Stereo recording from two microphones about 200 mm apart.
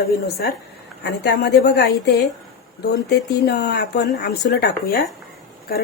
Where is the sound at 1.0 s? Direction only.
55° left (ahead or behind).